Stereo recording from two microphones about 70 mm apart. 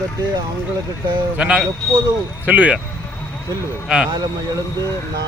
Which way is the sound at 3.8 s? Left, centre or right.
Centre.